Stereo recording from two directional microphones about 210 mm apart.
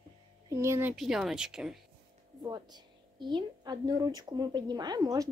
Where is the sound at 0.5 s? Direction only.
15° right (ahead or behind).